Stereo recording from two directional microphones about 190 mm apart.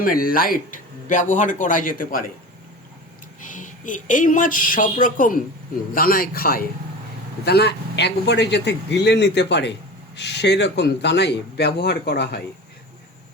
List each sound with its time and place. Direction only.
0.0 s speech: 50° left (ahead or behind)
3.5 s a man's voice: 40° left (ahead or behind); by 12.4 s 60° left (ahead or behind)